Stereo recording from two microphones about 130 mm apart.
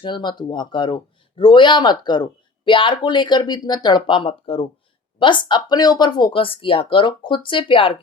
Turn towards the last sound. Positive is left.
turn(degrees=40)  # may be behind; listen again after turning